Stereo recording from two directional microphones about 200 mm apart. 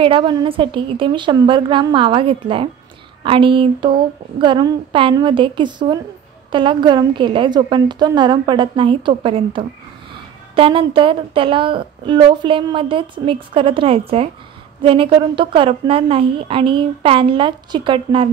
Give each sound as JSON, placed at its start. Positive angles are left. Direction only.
{"t": 0.0, "sound": "a woman's voice", "side_deg": -25}